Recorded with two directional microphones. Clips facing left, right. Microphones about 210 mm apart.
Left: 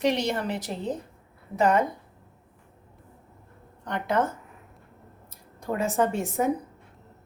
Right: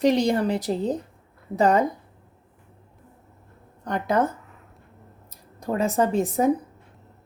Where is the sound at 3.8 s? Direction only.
40° right (ahead or behind).